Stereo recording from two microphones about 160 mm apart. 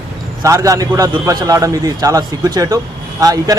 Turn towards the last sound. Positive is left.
turn(degrees=-25)  # may be behind; listen again after turning